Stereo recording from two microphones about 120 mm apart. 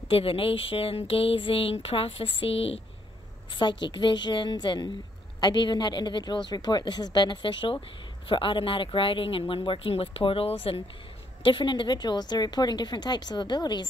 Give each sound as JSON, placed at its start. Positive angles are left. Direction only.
{"t": 0.1, "sound": "speech", "side_deg": 50}
{"t": 3.5, "sound": "a woman's voice", "side_deg": 40}